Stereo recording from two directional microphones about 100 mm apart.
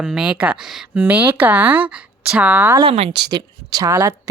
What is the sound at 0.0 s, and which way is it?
A woman's voice, 10° right (ahead or behind).